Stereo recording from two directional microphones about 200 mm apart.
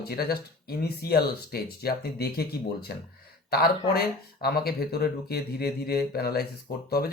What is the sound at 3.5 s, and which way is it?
Speech, 50° left (ahead or behind).